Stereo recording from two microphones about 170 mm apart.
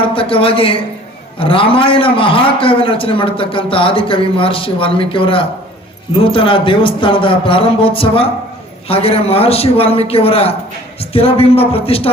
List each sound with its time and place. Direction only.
0.1 s a man's voice: 30° left (ahead or behind)